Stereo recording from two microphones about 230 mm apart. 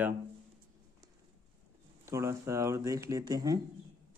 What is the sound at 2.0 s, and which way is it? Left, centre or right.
Speech, centre.